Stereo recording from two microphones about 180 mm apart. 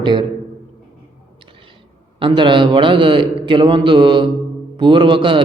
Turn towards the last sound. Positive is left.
turn(degrees=-30)  # may be behind; listen again after turning